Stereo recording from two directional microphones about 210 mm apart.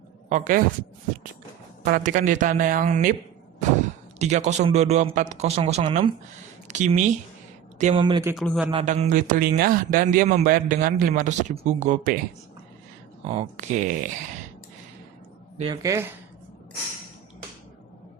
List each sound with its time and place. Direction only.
0.3 s a man's voice: 35° right (ahead or behind)
1.8 s a man's voice: 40° right (ahead or behind)
4.2 s a man's voice: 35° right (ahead or behind)
8.0 s speech: 20° right (ahead or behind)
8.4 s a man's voice: centre (ahead or behind)
8.7 s a man's voice: 30° right (ahead or behind)
13.2 s a man's voice: 30° right (ahead or behind)
15.5 s speech: 25° right (ahead or behind)